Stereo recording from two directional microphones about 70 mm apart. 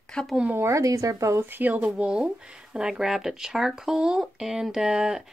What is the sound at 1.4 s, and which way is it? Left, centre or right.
Speech, right.